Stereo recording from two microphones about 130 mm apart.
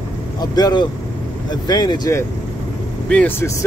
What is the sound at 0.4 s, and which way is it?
A man's voice, 30° left (ahead or behind).